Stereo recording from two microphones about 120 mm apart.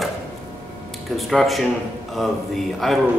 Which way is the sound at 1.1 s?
Centre (ahead or behind).